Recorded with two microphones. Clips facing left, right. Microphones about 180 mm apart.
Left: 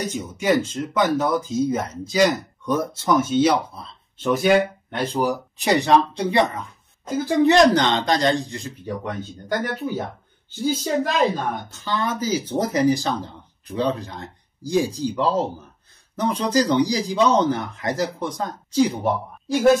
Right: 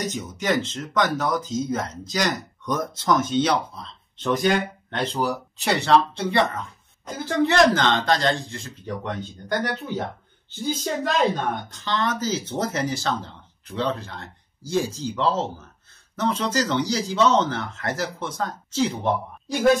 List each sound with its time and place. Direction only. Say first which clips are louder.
0.3 s speech: left 5 dB; 10° left (ahead or behind)
11.3 s speech: even; 10° left (ahead or behind)